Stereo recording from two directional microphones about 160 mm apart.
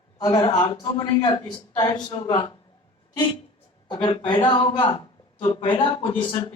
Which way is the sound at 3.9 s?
30° left (ahead or behind).